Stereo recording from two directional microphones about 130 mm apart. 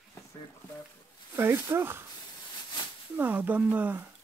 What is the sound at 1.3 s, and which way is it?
Speech, 15° right (ahead or behind).